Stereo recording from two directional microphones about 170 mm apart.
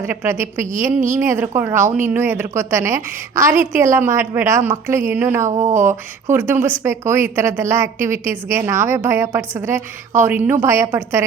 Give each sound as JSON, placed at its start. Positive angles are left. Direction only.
{"t": 0.1, "sound": "a woman's voice", "side_deg": -15}